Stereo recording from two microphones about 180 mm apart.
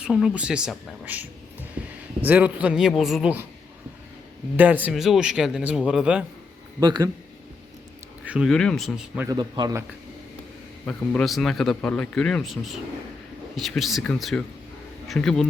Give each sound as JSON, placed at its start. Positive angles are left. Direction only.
{"t": 0.0, "sound": "speech", "side_deg": 0}
{"t": 1.8, "sound": "a sound", "side_deg": -10}
{"t": 2.2, "sound": "a man's voice", "side_deg": -10}
{"t": 4.5, "sound": "speech", "side_deg": -10}
{"t": 6.7, "sound": "speech", "side_deg": -25}
{"t": 8.2, "sound": "speech", "side_deg": -5}
{"t": 9.2, "sound": "speech", "side_deg": -25}
{"t": 10.8, "sound": "speech", "side_deg": 5}